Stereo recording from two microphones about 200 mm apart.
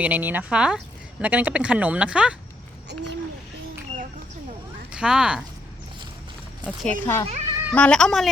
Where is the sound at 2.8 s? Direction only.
60° right (ahead or behind).